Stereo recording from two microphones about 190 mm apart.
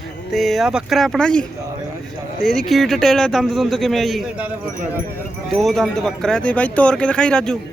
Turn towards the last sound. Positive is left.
turn(degrees=5)  # may be behind; listen again after turning